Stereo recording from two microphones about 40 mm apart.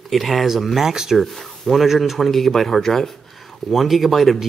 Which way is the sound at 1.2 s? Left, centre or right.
Centre.